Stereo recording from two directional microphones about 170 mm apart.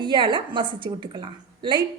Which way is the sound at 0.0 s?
25° right (ahead or behind).